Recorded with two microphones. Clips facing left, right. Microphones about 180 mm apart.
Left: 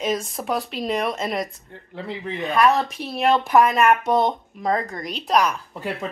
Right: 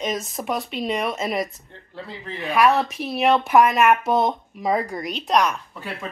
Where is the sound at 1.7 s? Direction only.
20° left (ahead or behind).